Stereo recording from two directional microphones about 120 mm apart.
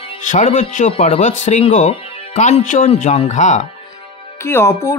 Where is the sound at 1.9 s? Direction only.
65° left (ahead or behind); by 3.6 s 85° left.